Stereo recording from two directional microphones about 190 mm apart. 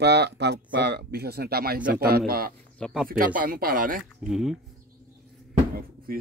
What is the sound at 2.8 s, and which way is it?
Speech, centre (ahead or behind).